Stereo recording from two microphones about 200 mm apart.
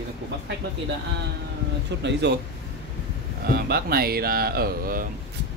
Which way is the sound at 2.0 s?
60° right (ahead or behind).